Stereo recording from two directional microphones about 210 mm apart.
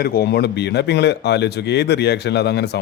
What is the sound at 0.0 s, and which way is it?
Speech, 50° left (ahead or behind).